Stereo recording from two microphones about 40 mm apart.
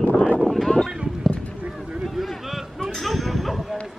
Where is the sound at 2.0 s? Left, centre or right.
Centre.